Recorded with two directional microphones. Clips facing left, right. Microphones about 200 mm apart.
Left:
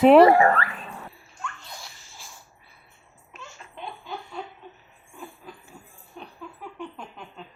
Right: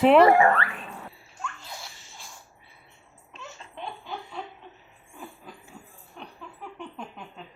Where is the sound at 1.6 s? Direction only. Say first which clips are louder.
Right 1 dB; 5° right (ahead or behind).